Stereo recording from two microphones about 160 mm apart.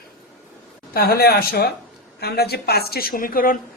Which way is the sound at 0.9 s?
70° left (ahead or behind).